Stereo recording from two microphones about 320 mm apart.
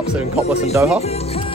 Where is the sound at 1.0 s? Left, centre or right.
Centre.